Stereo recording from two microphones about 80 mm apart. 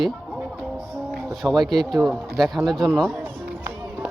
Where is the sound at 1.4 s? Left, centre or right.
Centre.